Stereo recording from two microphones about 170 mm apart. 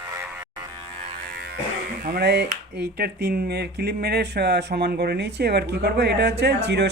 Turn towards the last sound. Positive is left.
turn(degrees=-85)